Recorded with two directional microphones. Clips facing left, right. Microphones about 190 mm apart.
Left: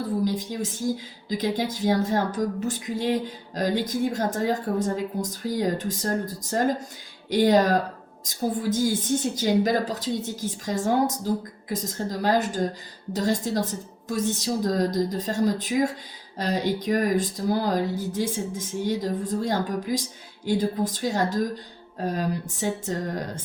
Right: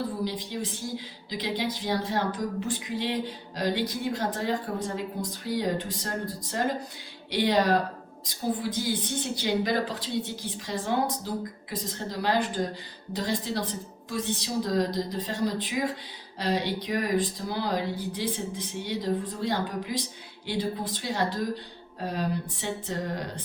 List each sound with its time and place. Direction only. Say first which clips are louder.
0.3 s speech: left 5 dB; 45° left (ahead or behind)